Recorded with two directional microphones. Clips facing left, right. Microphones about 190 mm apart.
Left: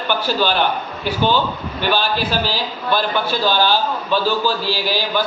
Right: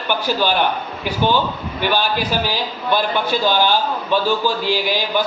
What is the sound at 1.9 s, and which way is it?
A man's voice, 15° right (ahead or behind).